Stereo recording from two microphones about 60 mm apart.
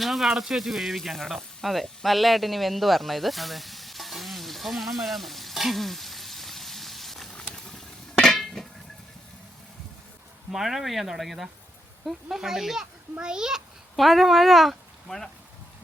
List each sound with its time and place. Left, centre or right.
0.0 s speech: centre
7.5 s a sound: centre
10.5 s a child's voice: centre
13.9 s speech: centre